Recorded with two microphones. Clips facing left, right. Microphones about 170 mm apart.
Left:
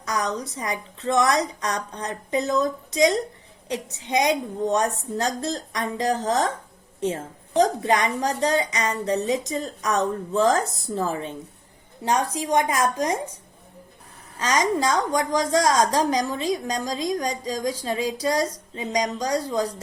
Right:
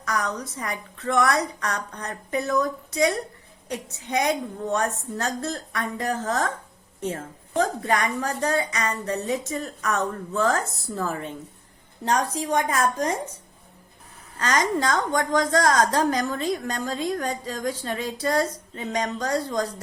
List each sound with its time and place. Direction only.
0.0 s a woman's voice: 15° left (ahead or behind)
15.2 s a woman's voice: 15° left (ahead or behind)